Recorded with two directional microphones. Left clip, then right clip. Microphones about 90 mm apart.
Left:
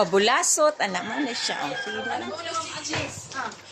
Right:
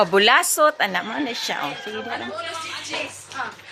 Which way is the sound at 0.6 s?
10° right (ahead or behind).